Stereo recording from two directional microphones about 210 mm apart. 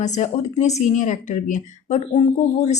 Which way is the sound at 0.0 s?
35° left (ahead or behind).